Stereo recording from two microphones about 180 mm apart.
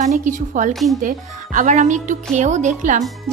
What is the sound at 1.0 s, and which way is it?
Speech, 45° right (ahead or behind).